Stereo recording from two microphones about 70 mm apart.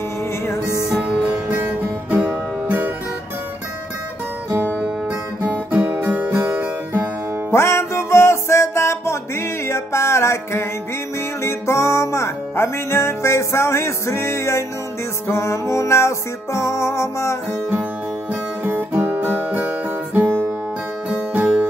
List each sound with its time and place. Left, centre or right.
1.5 s music: right
5.4 s music: right
7.5 s music: left
18.6 s guitar: right
20.2 s music: right
21.1 s music: right